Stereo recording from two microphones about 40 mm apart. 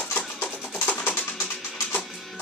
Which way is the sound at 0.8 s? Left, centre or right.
Left.